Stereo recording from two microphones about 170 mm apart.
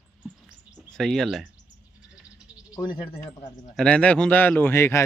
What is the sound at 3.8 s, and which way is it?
A man's voice, 5° left (ahead or behind).